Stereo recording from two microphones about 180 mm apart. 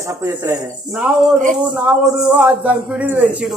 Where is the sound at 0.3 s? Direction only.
10° right (ahead or behind).